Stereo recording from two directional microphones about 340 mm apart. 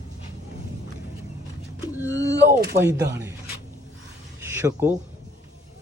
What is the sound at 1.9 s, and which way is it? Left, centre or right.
Speech, centre.